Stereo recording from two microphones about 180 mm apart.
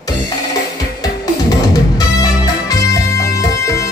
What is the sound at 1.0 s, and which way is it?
Music, 20° left (ahead or behind).